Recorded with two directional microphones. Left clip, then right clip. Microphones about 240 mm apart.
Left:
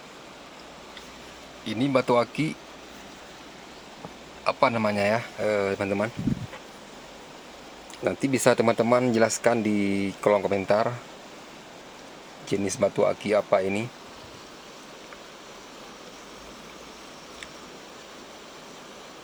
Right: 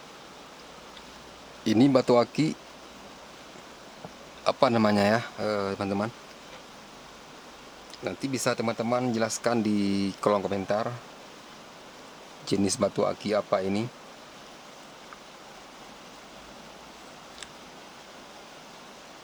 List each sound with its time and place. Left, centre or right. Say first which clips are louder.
1.6 s speech: right 2 dB; right
4.4 s speech: even; right
5.4 s speech: left 4 dB; centre
8.0 s speech: left 7 dB; centre
12.6 s speech: left 4 dB; centre